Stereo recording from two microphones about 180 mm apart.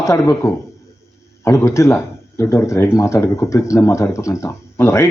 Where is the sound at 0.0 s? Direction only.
15° left (ahead or behind).